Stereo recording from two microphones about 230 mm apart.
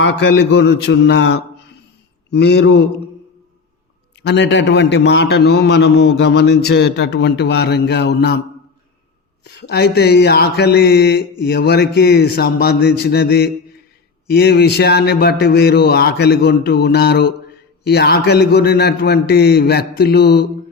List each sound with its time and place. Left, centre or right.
0.0 s a man's voice: left
4.2 s a man's voice: left
9.4 s a man's voice: left